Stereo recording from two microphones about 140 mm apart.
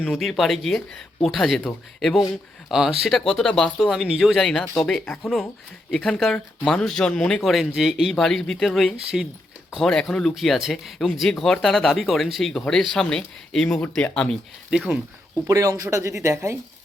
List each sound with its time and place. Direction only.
0.1 s speech: centre (ahead or behind)
15.4 s speech: 25° right (ahead or behind)